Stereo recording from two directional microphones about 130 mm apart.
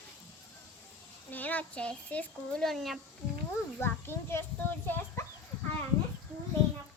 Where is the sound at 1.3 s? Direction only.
15° left (ahead or behind).